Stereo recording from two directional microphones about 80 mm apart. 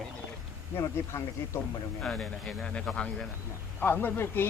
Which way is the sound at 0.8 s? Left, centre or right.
Left.